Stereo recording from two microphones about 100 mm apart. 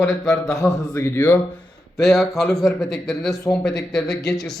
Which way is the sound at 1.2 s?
15° left (ahead or behind).